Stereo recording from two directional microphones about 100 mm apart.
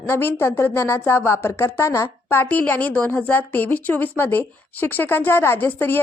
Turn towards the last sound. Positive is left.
turn(degrees=20)  # may be behind; listen again after turning